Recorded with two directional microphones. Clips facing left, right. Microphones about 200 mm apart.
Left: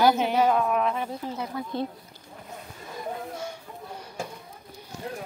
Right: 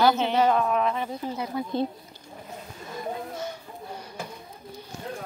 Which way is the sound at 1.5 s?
15° right (ahead or behind).